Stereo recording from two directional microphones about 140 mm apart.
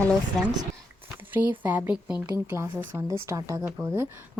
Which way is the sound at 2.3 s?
20° right (ahead or behind).